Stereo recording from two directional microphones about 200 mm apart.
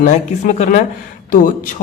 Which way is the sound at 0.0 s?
40° left (ahead or behind).